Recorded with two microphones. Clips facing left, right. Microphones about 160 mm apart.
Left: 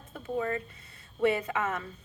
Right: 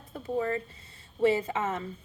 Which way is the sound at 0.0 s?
35° right (ahead or behind).